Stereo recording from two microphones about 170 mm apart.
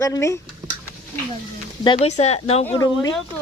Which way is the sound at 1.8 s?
30° left (ahead or behind).